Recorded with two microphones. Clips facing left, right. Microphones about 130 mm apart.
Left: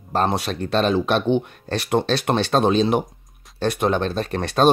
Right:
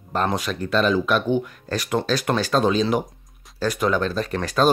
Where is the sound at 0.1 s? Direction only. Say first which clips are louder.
Left 2 dB; 30° left (ahead or behind).